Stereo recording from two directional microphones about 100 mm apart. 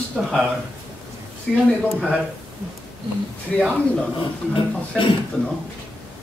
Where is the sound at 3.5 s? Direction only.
5° left (ahead or behind).